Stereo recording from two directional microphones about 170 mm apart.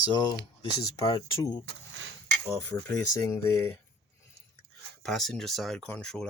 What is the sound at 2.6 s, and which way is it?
Speech, 20° left (ahead or behind).